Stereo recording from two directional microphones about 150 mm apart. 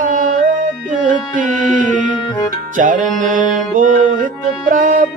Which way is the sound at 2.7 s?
60° right (ahead or behind).